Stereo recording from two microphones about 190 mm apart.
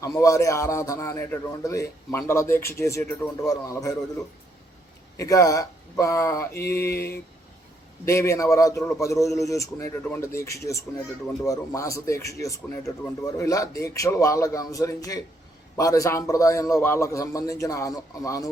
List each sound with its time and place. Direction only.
0.0 s a man's voice: 15° left (ahead or behind)
5.1 s a man's voice: 15° left (ahead or behind)
6.9 s speech: 55° left (ahead or behind)
8.0 s a man's voice: 15° left (ahead or behind)